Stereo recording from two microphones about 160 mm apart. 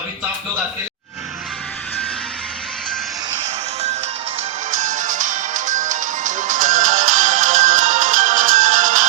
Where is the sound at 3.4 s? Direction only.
40° right (ahead or behind).